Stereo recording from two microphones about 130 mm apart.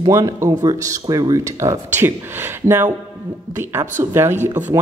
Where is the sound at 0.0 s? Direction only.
30° right (ahead or behind).